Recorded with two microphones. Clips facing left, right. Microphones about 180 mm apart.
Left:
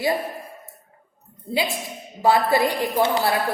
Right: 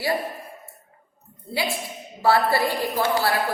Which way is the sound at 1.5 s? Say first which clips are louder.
Left 2 dB; 20° left (ahead or behind).